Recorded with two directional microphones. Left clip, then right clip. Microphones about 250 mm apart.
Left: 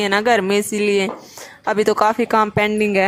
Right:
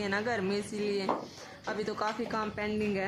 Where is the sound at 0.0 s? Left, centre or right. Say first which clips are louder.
Left 16 dB; left.